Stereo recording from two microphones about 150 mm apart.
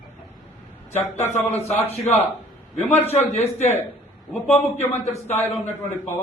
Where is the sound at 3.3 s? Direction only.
45° left (ahead or behind).